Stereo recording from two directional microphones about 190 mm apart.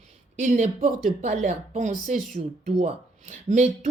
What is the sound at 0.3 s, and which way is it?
Speech, 40° right (ahead or behind).